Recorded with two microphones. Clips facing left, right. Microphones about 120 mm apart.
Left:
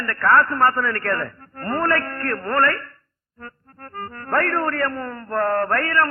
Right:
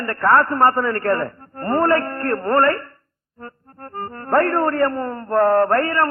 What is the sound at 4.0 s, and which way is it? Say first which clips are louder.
Music: right 5 dB; 25° right (ahead or behind).